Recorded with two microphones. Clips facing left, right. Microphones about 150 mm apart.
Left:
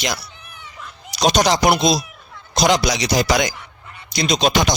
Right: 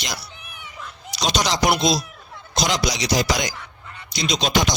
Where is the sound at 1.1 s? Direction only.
50° left (ahead or behind).